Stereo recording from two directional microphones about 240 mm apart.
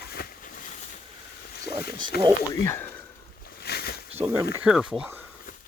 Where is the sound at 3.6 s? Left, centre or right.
Left.